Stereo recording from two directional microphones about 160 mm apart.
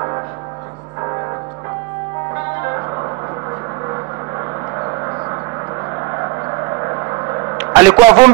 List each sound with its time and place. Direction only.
2.6 s music: 20° right (ahead or behind)
4.7 s gong: 20° right (ahead or behind)
6.1 s a sound: 20° right (ahead or behind)
7.5 s a man's voice: 20° right (ahead or behind)